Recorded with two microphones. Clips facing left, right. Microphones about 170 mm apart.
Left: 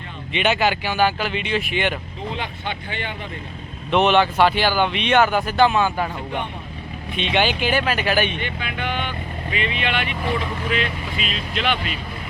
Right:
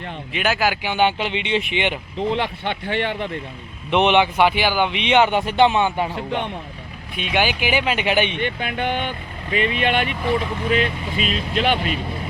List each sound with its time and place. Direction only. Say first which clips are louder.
0.3 s speech: left 1 dB; 5° right (ahead or behind); by 2.0 s 20° right (ahead or behind)
2.3 s speech: right 5 dB; 65° right (ahead or behind)
3.9 s speech: even; 15° right (ahead or behind)
7.3 s speech: even; 10° right (ahead or behind)
8.4 s speech: right 4 dB; 50° right (ahead or behind)